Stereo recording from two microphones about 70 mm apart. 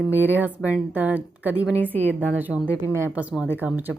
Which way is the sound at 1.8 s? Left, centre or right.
Left.